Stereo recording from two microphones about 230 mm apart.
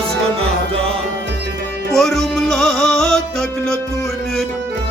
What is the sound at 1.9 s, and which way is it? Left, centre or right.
Music, centre.